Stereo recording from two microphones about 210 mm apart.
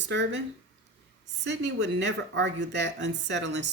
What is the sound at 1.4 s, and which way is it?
Speech, 55° right (ahead or behind).